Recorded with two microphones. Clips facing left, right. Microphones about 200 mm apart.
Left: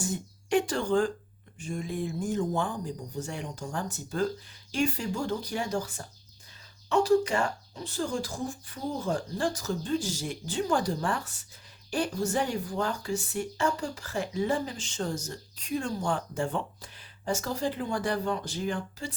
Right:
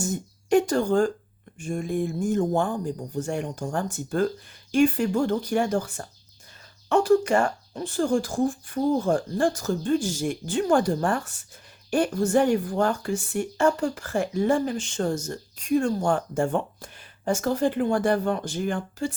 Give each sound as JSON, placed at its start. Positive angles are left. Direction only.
{"t": 0.0, "sound": "a woman's voice", "side_deg": -45}